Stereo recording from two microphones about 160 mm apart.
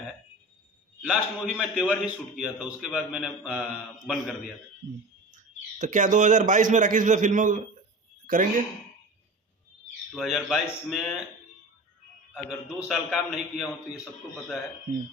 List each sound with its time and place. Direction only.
1.0 s a man's voice: 5° right (ahead or behind)
5.3 s a man's voice: 50° right (ahead or behind)
10.1 s a man's voice: centre (ahead or behind)
12.4 s a man's voice: 5° right (ahead or behind)